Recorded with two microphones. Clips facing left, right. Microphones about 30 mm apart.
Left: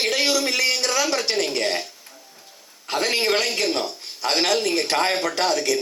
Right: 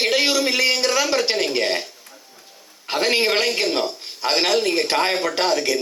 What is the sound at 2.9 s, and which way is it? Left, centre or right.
Speech, centre.